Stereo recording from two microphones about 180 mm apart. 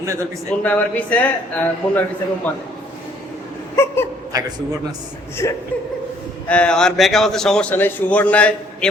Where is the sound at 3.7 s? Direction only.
15° left (ahead or behind).